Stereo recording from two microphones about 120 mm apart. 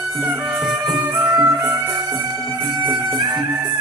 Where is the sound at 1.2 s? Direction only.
25° right (ahead or behind).